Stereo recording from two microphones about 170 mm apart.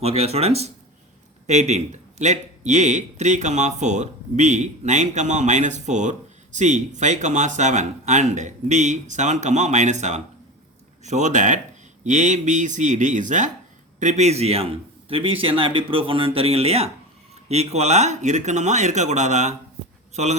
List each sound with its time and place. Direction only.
0.0 s a man's voice: 35° right (ahead or behind)